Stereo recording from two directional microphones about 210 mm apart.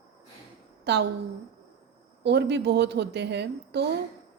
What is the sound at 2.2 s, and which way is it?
A woman's voice, 55° right (ahead or behind).